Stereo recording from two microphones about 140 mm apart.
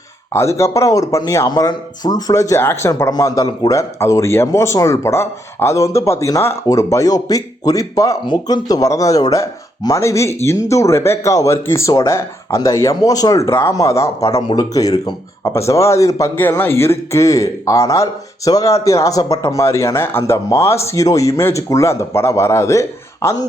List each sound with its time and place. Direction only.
0.3 s a man's voice: 20° left (ahead or behind)